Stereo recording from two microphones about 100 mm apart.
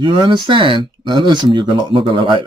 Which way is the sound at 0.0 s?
50° right (ahead or behind).